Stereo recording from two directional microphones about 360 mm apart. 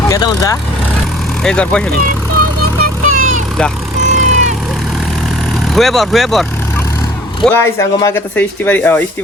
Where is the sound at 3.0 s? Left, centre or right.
Right.